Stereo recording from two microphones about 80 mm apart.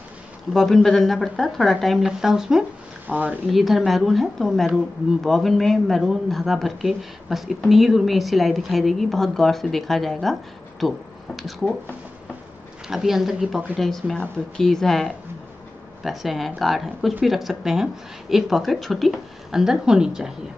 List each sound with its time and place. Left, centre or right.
0.5 s a woman's voice: centre
3.1 s speech: right
3.4 s a woman's voice: centre
10.8 s a sound: centre
12.8 s a woman's voice: centre